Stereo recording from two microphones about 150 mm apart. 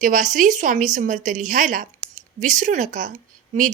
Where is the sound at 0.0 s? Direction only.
60° right (ahead or behind).